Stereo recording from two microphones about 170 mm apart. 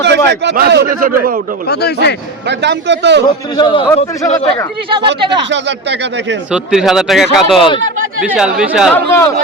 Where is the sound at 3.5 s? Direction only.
30° left (ahead or behind).